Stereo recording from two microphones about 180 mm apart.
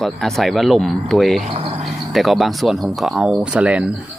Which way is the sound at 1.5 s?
30° right (ahead or behind).